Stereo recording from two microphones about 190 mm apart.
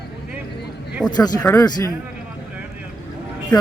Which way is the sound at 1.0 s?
20° left (ahead or behind).